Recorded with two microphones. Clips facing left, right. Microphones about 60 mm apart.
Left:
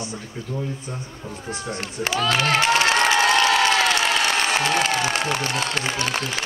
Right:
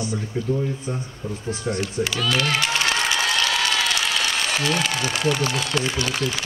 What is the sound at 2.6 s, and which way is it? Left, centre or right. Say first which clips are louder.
Applause: left 4 dB; left.